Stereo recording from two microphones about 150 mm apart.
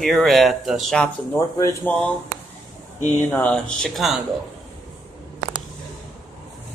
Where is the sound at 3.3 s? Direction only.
10° left (ahead or behind).